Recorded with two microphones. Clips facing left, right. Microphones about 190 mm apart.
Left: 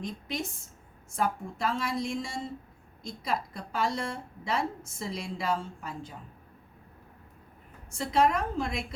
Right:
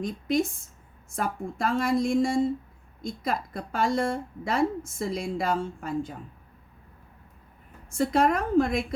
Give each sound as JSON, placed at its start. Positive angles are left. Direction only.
{"t": 0.0, "sound": "a woman's voice", "side_deg": -50}
{"t": 7.9, "sound": "a woman's voice", "side_deg": -50}